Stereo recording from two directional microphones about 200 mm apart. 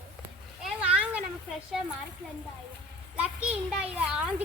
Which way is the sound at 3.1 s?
5° right (ahead or behind).